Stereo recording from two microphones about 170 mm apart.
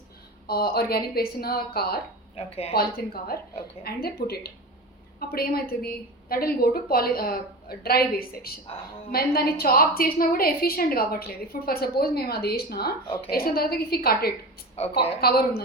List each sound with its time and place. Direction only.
0.4 s a woman's voice: 65° left (ahead or behind)
2.3 s a woman's voice: 35° left (ahead or behind)
2.7 s a woman's voice: 65° left (ahead or behind)
14.8 s a woman's voice: 35° left (ahead or behind)
15.2 s a woman's voice: 65° left (ahead or behind)